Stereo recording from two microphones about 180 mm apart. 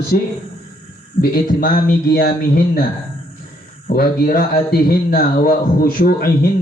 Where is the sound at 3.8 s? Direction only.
55° left (ahead or behind).